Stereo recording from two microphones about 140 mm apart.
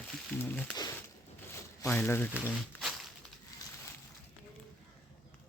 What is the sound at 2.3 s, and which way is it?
Speech, 10° left (ahead or behind).